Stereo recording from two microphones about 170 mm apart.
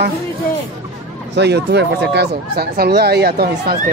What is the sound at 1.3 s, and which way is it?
Speech, 85° right.